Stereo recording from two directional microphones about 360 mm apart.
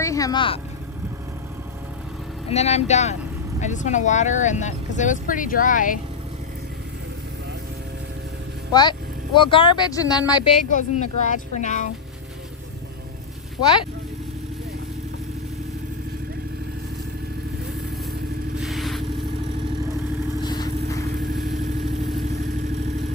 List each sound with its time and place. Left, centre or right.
0.0 s speech: centre
2.5 s speech: centre
8.7 s speech: centre
18.6 s vehicle: centre
20.4 s vehicle: centre